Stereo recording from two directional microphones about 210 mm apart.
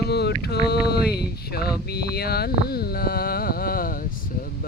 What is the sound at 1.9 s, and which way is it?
Carnatic music, 50° left (ahead or behind).